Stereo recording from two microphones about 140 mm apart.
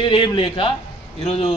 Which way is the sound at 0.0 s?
35° left (ahead or behind).